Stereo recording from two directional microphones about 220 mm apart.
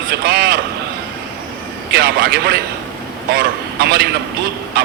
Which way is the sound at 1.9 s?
45° right (ahead or behind).